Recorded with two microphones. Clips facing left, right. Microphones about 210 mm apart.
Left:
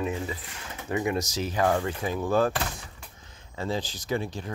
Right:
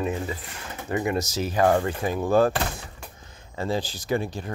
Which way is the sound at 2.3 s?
55° right (ahead or behind).